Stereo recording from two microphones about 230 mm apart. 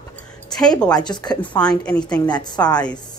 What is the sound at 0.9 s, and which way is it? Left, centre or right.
Speech, centre.